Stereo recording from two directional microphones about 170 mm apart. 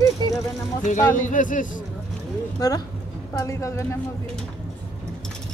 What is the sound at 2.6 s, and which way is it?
A woman's voice, 20° left (ahead or behind).